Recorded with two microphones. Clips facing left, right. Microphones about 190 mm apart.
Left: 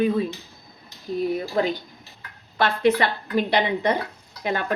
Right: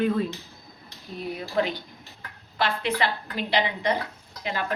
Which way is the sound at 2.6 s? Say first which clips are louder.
Left 6 dB; 50° left (ahead or behind).